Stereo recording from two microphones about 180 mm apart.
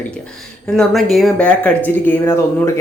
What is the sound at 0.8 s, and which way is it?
Speech, centre (ahead or behind).